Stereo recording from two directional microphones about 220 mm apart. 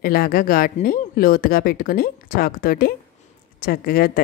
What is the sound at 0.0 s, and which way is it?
Speech, 40° left (ahead or behind).